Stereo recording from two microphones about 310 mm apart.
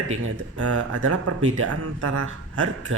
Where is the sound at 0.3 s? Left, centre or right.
Right.